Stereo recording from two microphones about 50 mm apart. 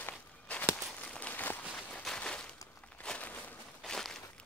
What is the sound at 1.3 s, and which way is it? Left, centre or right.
Walk, left.